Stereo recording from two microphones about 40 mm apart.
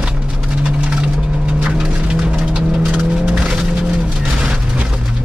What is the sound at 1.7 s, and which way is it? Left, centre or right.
Vehicle, right.